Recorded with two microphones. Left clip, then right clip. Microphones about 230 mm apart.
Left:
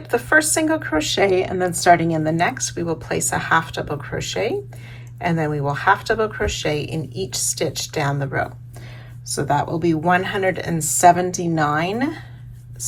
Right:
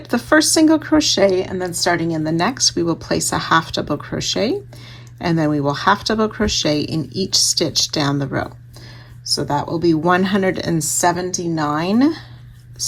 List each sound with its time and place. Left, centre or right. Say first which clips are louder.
0.0 s speech: right 1 dB; right
9.3 s speech: right 1 dB; centre